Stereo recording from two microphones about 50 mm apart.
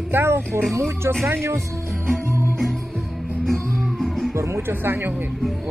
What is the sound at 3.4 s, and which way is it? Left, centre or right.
Music, centre.